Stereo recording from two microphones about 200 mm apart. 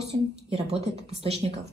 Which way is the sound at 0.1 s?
30° right (ahead or behind).